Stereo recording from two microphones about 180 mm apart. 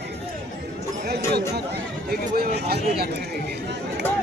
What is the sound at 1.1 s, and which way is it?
Chatter, 65° right (ahead or behind).